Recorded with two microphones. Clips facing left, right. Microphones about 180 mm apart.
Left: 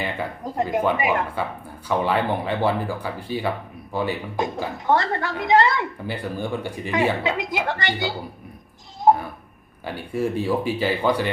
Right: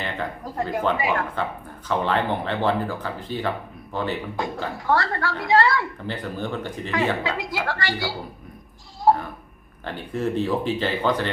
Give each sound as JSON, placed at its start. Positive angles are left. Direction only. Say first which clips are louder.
{"t": 0.0, "sound": "a woman's voice", "louder": "left 2 dB", "side_deg": 15}
{"t": 9.1, "sound": "a sound", "louder": "left 2 dB", "side_deg": 20}
{"t": 9.8, "sound": "speech", "louder": "left 1 dB", "side_deg": 10}